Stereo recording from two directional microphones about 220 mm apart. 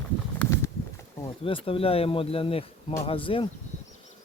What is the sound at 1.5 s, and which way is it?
Speech, 25° left (ahead or behind).